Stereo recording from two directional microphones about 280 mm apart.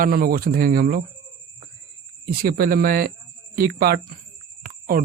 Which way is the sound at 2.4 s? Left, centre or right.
Right.